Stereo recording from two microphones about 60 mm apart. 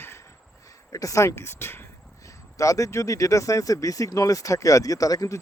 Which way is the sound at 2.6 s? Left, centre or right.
Left.